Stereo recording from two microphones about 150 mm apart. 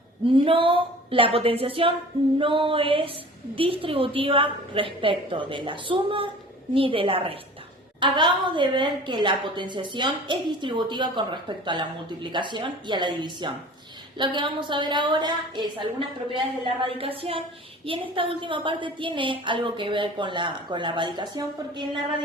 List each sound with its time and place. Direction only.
0.3 s a woman's voice: 35° right (ahead or behind)